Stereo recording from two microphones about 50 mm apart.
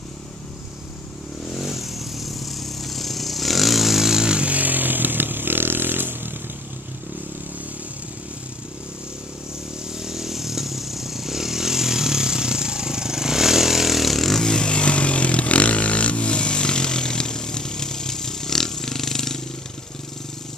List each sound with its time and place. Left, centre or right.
1.5 s vehicle: centre; by 6.3 s right
9.9 s vehicle: centre
14.4 s chainsaw: centre